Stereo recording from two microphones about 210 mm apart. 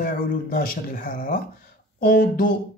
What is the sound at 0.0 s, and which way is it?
Speech, 45° left (ahead or behind).